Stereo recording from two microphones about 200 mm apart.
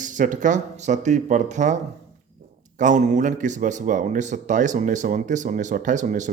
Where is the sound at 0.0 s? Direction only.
40° right (ahead or behind).